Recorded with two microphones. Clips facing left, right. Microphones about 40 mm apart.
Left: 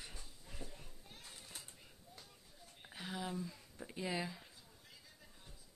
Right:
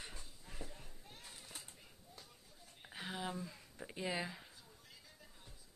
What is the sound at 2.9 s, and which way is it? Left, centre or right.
Speech, centre.